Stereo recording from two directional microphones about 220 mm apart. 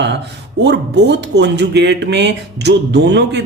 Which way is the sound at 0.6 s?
50° right (ahead or behind).